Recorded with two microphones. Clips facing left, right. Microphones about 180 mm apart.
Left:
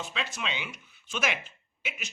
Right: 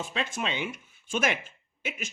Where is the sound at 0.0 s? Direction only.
50° right (ahead or behind).